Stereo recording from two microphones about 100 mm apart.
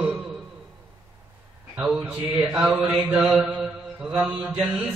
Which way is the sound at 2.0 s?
15° right (ahead or behind).